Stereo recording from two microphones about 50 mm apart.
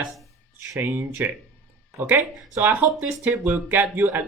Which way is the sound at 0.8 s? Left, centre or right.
Right.